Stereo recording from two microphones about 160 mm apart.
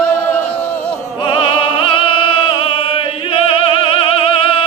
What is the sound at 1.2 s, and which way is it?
Music, 30° left (ahead or behind).